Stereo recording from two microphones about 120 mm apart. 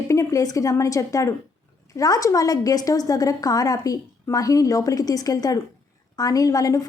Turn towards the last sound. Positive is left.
turn(degrees=30)  # may be behind; listen again after turning